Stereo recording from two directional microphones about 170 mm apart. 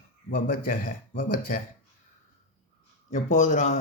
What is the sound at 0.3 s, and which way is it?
Speech, 55° left (ahead or behind).